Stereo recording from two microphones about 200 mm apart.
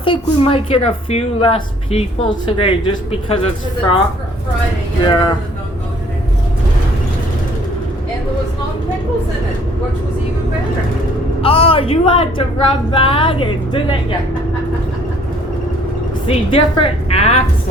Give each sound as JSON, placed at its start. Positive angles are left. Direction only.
{"t": 0.0, "sound": "a woman's voice", "side_deg": 25}
{"t": 5.0, "sound": "a woman's voice", "side_deg": 25}
{"t": 11.4, "sound": "a woman's voice", "side_deg": 30}
{"t": 16.2, "sound": "a woman's voice", "side_deg": 25}